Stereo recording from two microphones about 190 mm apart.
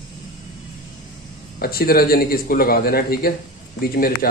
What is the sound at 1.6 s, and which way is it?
A man's voice, 50° left (ahead or behind).